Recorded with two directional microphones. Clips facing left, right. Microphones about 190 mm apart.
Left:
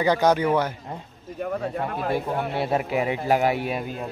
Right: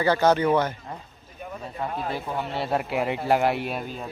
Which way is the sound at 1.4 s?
70° left (ahead or behind).